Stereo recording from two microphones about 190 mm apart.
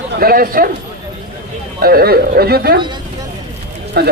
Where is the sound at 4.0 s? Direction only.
60° right (ahead or behind).